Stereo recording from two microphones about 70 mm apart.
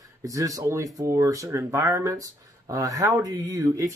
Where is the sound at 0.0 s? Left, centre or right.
Right.